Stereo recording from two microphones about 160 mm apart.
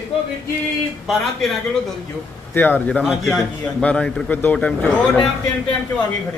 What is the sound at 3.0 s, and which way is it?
A man's voice, centre (ahead or behind).